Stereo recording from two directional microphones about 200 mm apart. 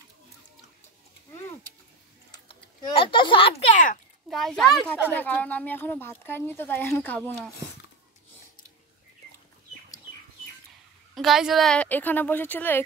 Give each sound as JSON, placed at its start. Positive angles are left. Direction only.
{"t": 2.3, "sound": "typing", "side_deg": 25}
{"t": 3.7, "sound": "a sound", "side_deg": 40}
{"t": 4.3, "sound": "speech", "side_deg": 0}
{"t": 11.1, "sound": "speech", "side_deg": 0}